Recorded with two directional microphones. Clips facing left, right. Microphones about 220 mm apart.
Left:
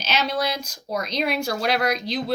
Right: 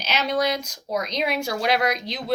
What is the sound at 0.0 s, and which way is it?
Speech, 15° right (ahead or behind).